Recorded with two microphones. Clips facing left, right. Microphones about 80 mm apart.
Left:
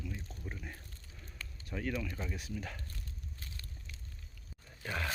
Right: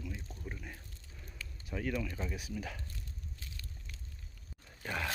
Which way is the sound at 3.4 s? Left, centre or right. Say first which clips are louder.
Left 1 dB; left.